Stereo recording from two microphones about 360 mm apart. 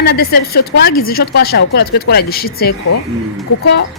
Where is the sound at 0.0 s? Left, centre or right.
Left.